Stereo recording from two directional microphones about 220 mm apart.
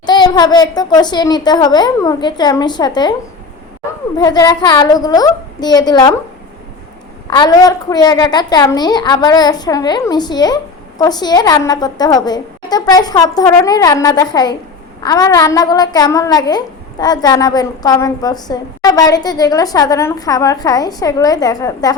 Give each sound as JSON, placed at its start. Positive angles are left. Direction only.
{"t": 0.0, "sound": "a child's voice", "side_deg": 20}
{"t": 7.3, "sound": "a woman's voice", "side_deg": 20}